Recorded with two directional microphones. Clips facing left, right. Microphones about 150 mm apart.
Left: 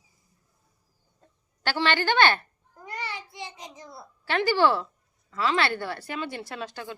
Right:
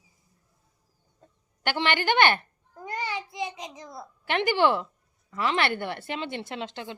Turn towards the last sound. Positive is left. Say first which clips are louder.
# right 1 dB
turn(degrees=-20)  # may be behind; listen again after turning